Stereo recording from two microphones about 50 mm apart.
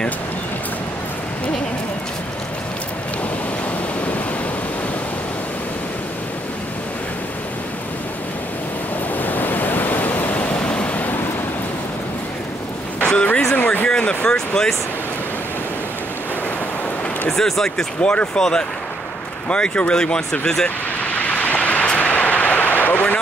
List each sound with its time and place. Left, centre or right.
9.1 s waves: left
13.0 s a sound: left
17.3 s speech: centre
18.0 s speech: left
20.6 s vehicle: left